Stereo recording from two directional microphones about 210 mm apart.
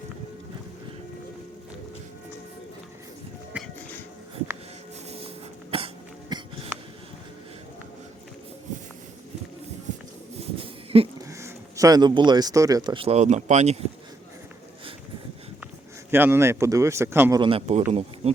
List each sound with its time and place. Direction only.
3.5 s music: 5° right (ahead or behind)
5.7 s cough: 25° right (ahead or behind)
10.9 s a sound: 30° right (ahead or behind)
11.3 s speech: 15° right (ahead or behind); by 13.8 s 30° right (ahead or behind)
16.1 s speech: 10° right (ahead or behind)
17.4 s a man's voice: 30° right (ahead or behind)